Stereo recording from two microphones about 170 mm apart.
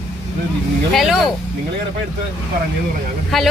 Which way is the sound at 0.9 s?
Centre (ahead or behind).